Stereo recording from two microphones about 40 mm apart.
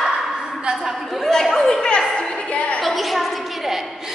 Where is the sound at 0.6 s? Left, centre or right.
Centre.